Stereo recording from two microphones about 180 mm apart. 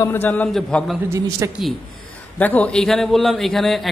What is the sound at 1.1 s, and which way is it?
Speech, 15° right (ahead or behind).